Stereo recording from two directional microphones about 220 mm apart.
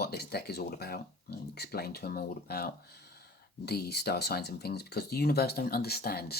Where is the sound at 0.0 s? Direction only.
45° left (ahead or behind).